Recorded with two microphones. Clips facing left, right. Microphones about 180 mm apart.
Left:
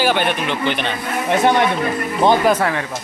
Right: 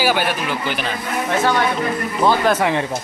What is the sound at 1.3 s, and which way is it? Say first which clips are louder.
Speech: left 3 dB; 20° left (ahead or behind).